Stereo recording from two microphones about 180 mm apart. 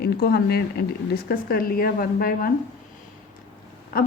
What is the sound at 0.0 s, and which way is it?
A woman's voice, 60° left (ahead or behind).